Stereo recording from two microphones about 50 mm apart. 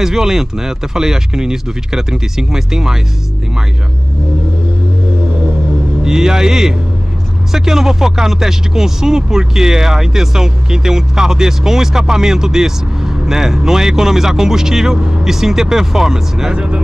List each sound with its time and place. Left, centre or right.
0.0 s speech: centre
6.0 s speech: centre
16.5 s speech: right